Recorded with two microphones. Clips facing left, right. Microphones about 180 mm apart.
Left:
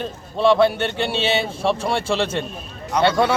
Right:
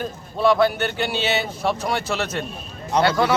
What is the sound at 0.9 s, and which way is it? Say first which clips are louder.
A man's voice: left 2 dB; 30° left (ahead or behind).